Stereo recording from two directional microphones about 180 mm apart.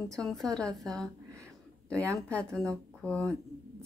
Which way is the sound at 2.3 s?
5° left (ahead or behind).